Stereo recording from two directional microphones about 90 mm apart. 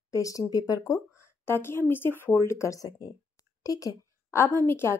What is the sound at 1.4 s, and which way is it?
Speech, 25° left (ahead or behind).